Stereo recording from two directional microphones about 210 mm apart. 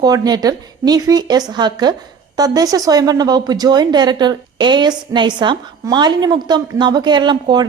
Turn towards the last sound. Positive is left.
turn(degrees=-20)  # may be behind; listen again after turning